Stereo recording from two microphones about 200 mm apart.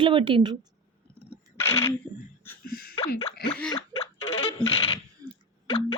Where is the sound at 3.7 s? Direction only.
30° left (ahead or behind).